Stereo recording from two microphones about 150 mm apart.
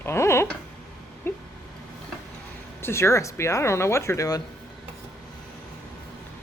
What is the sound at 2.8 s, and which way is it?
Speech, 15° left (ahead or behind).